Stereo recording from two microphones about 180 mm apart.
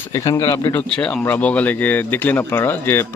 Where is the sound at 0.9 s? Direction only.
5° left (ahead or behind).